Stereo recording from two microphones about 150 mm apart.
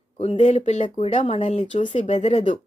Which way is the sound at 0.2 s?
45° left (ahead or behind).